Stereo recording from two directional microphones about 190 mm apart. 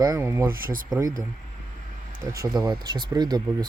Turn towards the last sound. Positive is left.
turn(degrees=-20)  # may be behind; listen again after turning